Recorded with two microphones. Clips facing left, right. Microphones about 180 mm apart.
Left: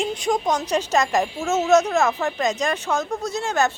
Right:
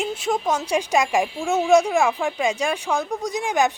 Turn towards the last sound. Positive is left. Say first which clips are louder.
# right 1 dB
turn(degrees=-15)  # may be behind; listen again after turning